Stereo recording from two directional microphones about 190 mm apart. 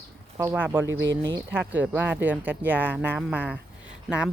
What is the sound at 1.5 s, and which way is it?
Speech, 10° right (ahead or behind).